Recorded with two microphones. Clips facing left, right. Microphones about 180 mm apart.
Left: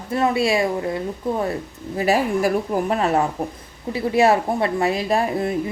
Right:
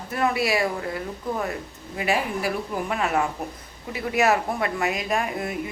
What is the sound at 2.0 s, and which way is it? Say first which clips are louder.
A woman's voice: left 6 dB; 40° left (ahead or behind).